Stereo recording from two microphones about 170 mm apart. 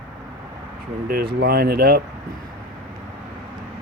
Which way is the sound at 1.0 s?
60° right (ahead or behind).